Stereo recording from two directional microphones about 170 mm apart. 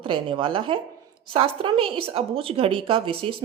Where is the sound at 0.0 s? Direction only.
30° right (ahead or behind).